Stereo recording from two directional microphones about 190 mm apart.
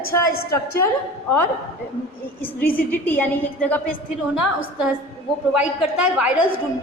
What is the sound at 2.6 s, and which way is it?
Speech, 50° left (ahead or behind).